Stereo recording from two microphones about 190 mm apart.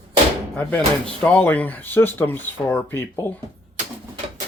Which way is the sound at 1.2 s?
5° left (ahead or behind).